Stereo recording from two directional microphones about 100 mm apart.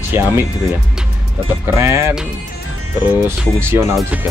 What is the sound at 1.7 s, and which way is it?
Speech, 30° right (ahead or behind).